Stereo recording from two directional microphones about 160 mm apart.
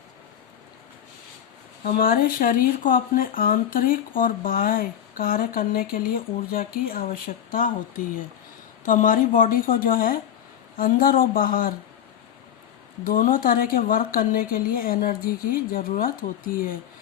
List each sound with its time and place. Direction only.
1.8 s speech: 65° left (ahead or behind)
13.1 s speech: 60° left (ahead or behind)